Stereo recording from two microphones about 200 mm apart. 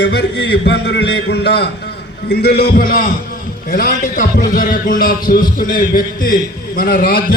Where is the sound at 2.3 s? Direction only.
55° left (ahead or behind).